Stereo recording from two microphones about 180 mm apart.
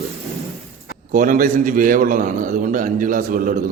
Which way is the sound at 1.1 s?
50° right (ahead or behind).